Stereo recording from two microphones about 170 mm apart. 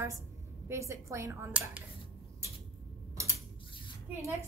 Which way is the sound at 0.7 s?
15° right (ahead or behind).